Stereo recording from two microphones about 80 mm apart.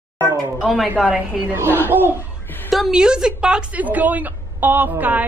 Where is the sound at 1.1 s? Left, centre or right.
Centre.